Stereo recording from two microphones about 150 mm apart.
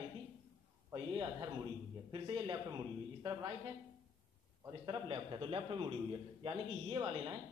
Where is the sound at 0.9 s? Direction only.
30° right (ahead or behind).